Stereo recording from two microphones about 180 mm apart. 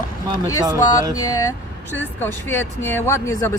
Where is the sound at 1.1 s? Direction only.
20° left (ahead or behind).